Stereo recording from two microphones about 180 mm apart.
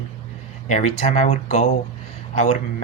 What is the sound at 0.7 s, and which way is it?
Speech, 40° left (ahead or behind).